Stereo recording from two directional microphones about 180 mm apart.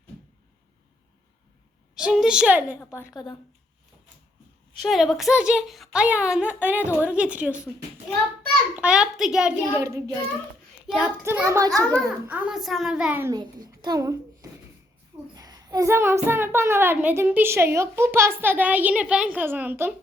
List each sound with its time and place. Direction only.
2.0 s a woman's voice: 5° right (ahead or behind)
4.8 s a woman's voice: centre (ahead or behind)
8.7 s a woman's voice: 5° right (ahead or behind)
9.8 s a child's voice: 15° right (ahead or behind)
11.2 s a child's voice: 15° right (ahead or behind)
11.9 s a woman's voice: 5° left (ahead or behind)
12.3 s a woman's voice: 5° right (ahead or behind)
13.3 s a woman's voice: 20° right (ahead or behind)
14.4 s a sound: 20° right (ahead or behind)
15.4 s a child's voice: 20° right (ahead or behind)